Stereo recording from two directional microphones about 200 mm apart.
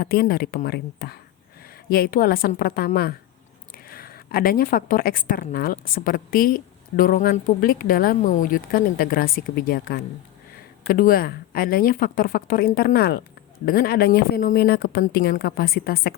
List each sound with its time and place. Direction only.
0.0 s a woman's voice: 50° left (ahead or behind)